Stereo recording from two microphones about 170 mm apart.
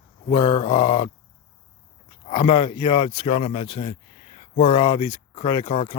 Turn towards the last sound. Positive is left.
turn(degrees=25)  # may be behind; listen again after turning